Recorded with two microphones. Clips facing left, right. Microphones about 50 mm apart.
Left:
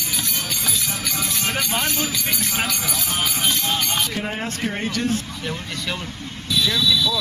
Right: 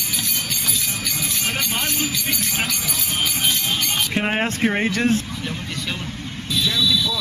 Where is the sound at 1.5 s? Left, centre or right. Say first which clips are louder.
Left 1 dB; centre.